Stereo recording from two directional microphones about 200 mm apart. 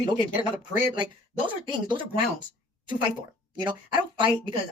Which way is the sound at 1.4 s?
25° right (ahead or behind).